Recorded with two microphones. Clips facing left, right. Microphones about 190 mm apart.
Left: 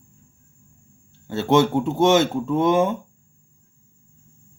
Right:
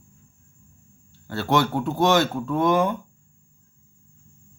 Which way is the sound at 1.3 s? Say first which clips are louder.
Left 5 dB; 20° left (ahead or behind).